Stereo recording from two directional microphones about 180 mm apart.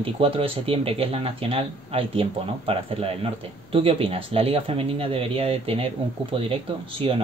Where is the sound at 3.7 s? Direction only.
30° right (ahead or behind).